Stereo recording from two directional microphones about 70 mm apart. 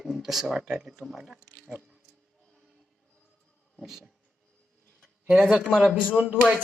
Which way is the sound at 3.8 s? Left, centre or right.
Centre.